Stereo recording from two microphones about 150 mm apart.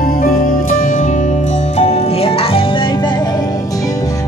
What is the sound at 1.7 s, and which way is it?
Music, 45° left (ahead or behind).